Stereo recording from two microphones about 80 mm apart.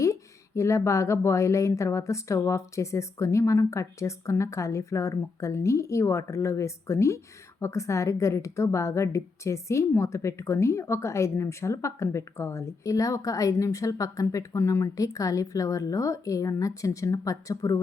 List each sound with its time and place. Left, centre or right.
0.0 s a woman's voice: left